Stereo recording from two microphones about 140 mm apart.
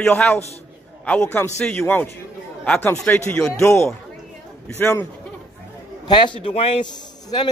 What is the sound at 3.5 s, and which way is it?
A man's voice, 20° left (ahead or behind).